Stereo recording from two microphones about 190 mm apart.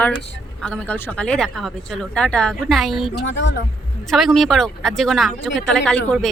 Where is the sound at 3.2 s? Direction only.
70° left (ahead or behind).